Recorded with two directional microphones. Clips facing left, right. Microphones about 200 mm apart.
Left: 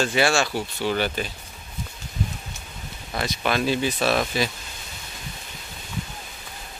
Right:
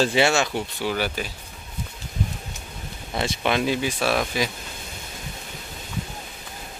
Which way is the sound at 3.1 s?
25° right (ahead or behind).